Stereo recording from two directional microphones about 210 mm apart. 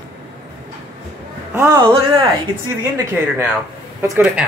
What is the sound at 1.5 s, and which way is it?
Speech, 15° right (ahead or behind).